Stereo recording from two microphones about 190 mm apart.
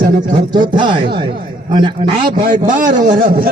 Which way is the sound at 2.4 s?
45° right (ahead or behind).